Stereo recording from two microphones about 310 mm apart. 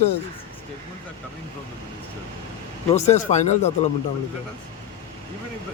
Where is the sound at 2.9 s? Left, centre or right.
Left.